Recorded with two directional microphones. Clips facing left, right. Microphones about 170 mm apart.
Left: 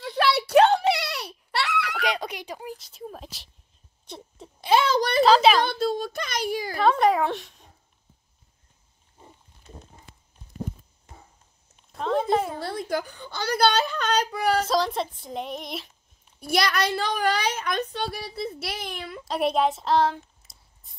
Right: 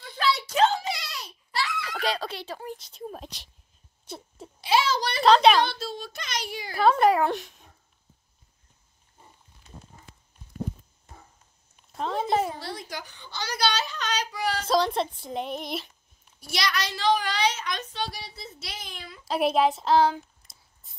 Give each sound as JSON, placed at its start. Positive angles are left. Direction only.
{"t": 0.0, "sound": "a sound", "side_deg": 70}
{"t": 2.0, "sound": "speech", "side_deg": 15}
{"t": 2.7, "sound": "speech", "side_deg": 5}
{"t": 4.0, "sound": "a sound", "side_deg": -5}
{"t": 4.6, "sound": "a child's voice", "side_deg": 50}
{"t": 5.2, "sound": "speech", "side_deg": 0}
{"t": 5.7, "sound": "a child's voice", "side_deg": 50}
{"t": 6.7, "sound": "speech", "side_deg": 0}
{"t": 11.9, "sound": "speech", "side_deg": 0}
{"t": 12.5, "sound": "a child's voice", "side_deg": 55}
{"t": 14.7, "sound": "speech", "side_deg": 0}
{"t": 16.3, "sound": "a woman's voice", "side_deg": 55}
{"t": 19.2, "sound": "speech", "side_deg": 0}